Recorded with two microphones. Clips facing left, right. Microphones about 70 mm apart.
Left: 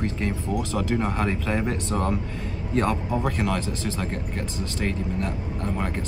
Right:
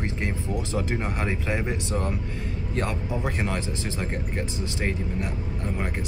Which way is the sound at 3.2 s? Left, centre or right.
Right.